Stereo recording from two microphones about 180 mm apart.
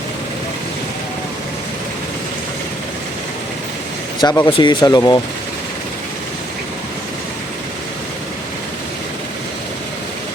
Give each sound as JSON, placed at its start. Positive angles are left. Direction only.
{"t": 4.2, "sound": "speech", "side_deg": 25}